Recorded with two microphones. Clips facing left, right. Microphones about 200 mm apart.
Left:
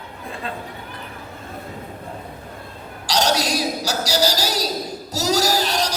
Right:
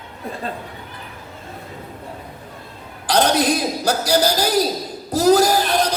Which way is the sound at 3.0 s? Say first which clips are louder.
Right 4 dB; 55° right (ahead or behind).